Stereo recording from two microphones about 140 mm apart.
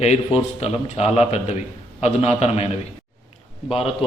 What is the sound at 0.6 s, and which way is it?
A man's voice, 50° left (ahead or behind).